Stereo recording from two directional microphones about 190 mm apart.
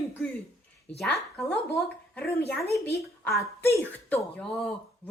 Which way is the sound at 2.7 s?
15° left (ahead or behind).